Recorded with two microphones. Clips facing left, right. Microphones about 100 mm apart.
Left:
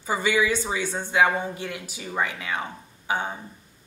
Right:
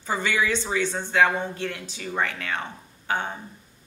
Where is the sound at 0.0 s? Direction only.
10° left (ahead or behind).